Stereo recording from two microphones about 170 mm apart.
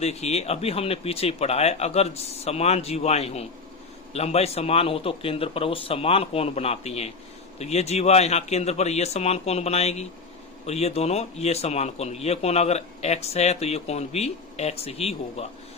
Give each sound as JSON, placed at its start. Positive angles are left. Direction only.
{"t": 0.0, "sound": "a man's voice", "side_deg": 40}